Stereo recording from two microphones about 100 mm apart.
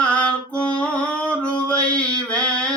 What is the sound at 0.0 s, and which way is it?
Music, 10° left (ahead or behind).